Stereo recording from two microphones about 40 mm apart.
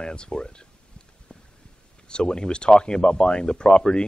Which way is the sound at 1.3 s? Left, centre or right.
Left.